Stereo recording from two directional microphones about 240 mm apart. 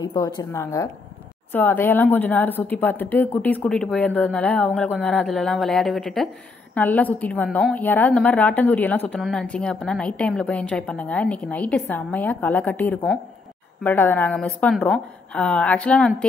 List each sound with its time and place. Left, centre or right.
0.0 s a woman's voice: centre